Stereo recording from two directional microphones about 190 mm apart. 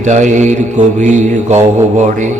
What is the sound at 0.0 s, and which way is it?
Mantra, 40° right (ahead or behind).